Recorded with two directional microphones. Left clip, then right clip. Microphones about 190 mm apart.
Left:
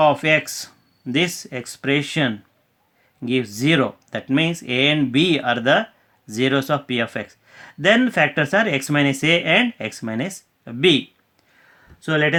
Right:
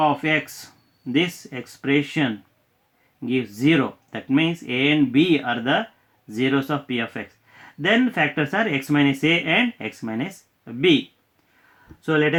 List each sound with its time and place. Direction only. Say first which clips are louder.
0.0 s speech: left 4 dB; 50° left (ahead or behind)
12.0 s speech: left 1 dB; 45° left (ahead or behind)